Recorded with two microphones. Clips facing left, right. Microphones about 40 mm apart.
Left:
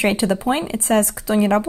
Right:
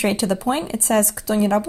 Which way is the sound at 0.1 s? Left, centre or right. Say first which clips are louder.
Left 2 dB; left.